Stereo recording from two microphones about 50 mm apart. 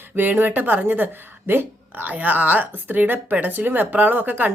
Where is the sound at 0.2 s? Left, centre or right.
Right.